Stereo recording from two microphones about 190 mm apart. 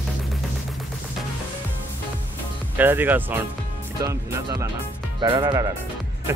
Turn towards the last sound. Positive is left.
turn(degrees=-20)  # may be behind; listen again after turning